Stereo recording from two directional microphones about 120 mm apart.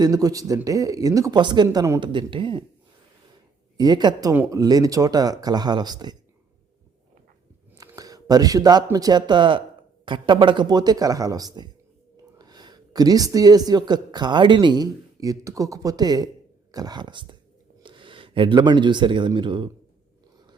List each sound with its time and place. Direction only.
0.0 s speech: 30° right (ahead or behind)
1.4 s speech: 40° right (ahead or behind)
1.6 s speech: 25° right (ahead or behind)
2.0 s speech: 40° right (ahead or behind)
3.8 s speech: 35° right (ahead or behind)
7.8 s speech: 30° right (ahead or behind)